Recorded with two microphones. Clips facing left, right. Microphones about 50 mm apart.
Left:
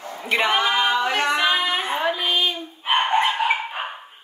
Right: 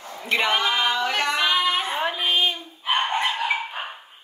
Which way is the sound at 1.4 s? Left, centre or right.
Left.